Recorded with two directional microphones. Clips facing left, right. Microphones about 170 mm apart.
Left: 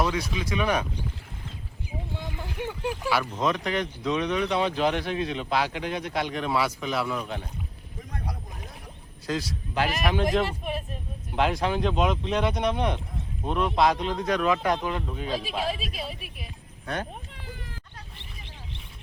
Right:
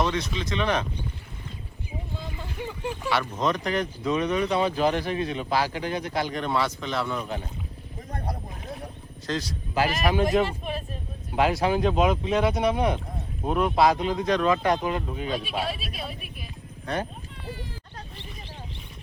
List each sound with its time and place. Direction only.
0.0 s speech: 10° left (ahead or behind)
2.6 s speech: 10° left (ahead or behind)
8.1 s vehicle: 50° right (ahead or behind)
9.2 s speech: 5° left (ahead or behind)
11.3 s speech: 5° right (ahead or behind)
16.8 s speech: centre (ahead or behind)